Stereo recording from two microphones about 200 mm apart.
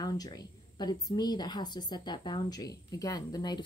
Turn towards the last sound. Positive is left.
turn(degrees=20)  # may be behind; listen again after turning